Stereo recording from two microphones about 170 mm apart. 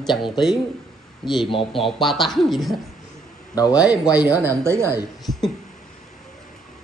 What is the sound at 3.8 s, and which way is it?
Speech, 5° right (ahead or behind).